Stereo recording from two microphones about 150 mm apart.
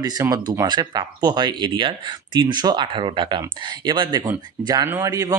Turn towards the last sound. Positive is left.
turn(degrees=-25)  # may be behind; listen again after turning